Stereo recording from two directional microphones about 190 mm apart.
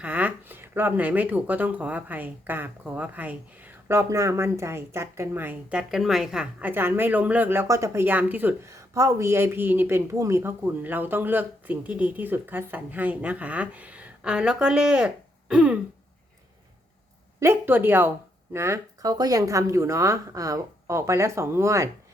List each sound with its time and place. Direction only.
0.0 s speech: 5° right (ahead or behind)
17.4 s speech: 10° right (ahead or behind)